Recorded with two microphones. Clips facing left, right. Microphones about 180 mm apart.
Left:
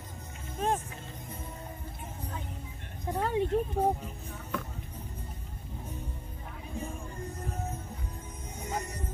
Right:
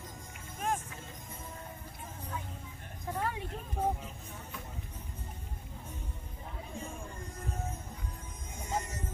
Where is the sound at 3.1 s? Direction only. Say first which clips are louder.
Left 7 dB; 25° left (ahead or behind).